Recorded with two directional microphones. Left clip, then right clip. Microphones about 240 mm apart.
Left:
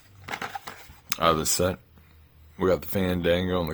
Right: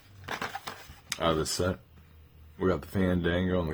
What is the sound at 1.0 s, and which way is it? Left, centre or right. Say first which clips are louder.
Speech: left 5 dB; left.